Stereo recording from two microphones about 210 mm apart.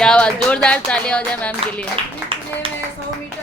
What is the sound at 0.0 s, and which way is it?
Speech, 5° left (ahead or behind).